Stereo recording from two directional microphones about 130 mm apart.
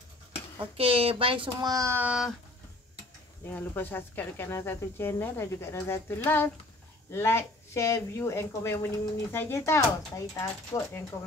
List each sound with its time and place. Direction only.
0.7 s speech: 45° right (ahead or behind)
1.7 s child singing: 25° right (ahead or behind)
2.0 s a sound: 10° right (ahead or behind)
3.4 s speech: 15° left (ahead or behind)